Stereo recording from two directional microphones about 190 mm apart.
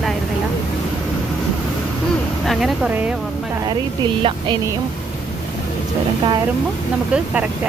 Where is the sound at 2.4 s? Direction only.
Centre (ahead or behind).